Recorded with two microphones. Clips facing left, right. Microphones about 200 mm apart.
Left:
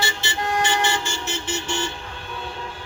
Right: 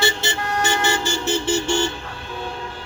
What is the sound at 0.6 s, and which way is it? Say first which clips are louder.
Vehicle: right 3 dB; 35° right (ahead or behind).